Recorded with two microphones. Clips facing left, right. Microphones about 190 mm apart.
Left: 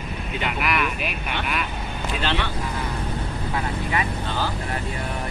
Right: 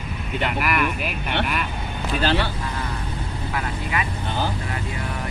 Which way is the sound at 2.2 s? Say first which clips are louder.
Right 4 dB; 40° right (ahead or behind).